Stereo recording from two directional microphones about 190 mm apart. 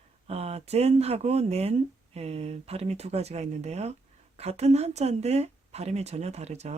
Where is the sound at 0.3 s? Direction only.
30° right (ahead or behind).